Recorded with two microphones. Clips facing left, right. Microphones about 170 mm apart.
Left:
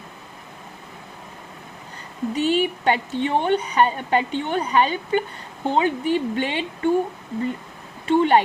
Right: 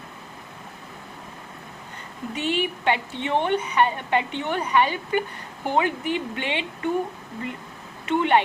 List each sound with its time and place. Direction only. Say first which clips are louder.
2.3 s speech: left 5 dB; 35° left (ahead or behind)
8.0 s speech: left 4 dB; 30° left (ahead or behind)